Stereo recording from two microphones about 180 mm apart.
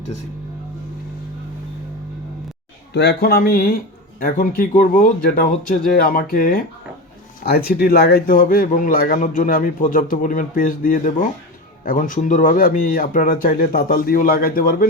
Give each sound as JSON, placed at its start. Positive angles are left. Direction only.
{"t": 2.9, "sound": "speech", "side_deg": 70}